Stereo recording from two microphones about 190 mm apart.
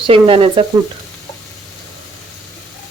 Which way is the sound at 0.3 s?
30° right (ahead or behind).